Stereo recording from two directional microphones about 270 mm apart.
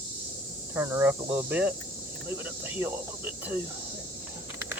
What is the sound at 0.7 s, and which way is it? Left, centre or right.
Speech, centre.